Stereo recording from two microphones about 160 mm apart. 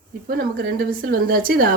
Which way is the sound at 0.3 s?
65° right (ahead or behind).